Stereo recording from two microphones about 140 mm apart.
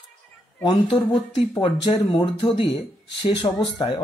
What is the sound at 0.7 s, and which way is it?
Speech, 35° left (ahead or behind).